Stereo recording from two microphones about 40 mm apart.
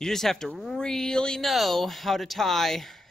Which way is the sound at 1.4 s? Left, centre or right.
Centre.